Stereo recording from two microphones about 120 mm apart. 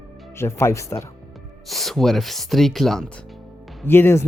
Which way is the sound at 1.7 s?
Centre (ahead or behind).